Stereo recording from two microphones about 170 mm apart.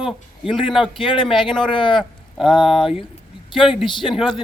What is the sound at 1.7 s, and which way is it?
Speech, 30° left (ahead or behind).